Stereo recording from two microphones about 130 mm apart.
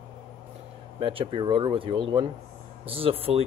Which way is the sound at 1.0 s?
45° right (ahead or behind).